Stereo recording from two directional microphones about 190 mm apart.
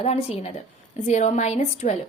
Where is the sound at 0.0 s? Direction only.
35° left (ahead or behind).